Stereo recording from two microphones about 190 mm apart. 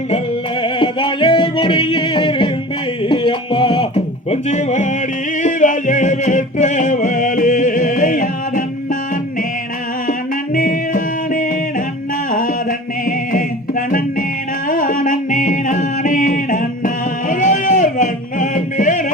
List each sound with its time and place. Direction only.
0.6 s music: 25° left (ahead or behind); by 8.6 s 45° left (ahead or behind)
10.1 s music: 45° left (ahead or behind)
13.1 s music: 45° left (ahead or behind)